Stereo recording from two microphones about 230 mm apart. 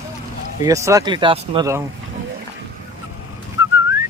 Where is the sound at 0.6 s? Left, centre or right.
Centre.